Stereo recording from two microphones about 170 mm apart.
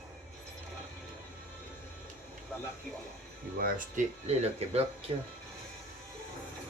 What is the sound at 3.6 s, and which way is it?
Speech, 55° right (ahead or behind).